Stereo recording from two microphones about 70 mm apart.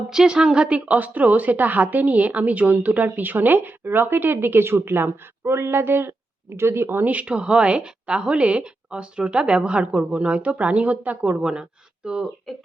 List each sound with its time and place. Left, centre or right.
0.1 s a woman's voice: centre